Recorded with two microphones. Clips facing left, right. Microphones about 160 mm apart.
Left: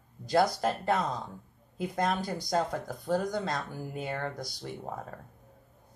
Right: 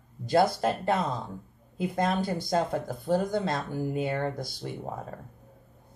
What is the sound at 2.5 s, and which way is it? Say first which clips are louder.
Speech: right 2 dB; 25° right (ahead or behind).